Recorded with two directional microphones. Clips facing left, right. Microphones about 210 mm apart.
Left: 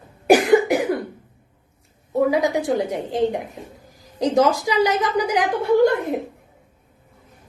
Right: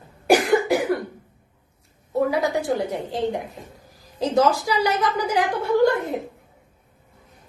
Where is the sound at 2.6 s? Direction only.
20° left (ahead or behind).